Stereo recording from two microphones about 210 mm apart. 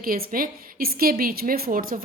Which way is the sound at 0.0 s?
45° right (ahead or behind).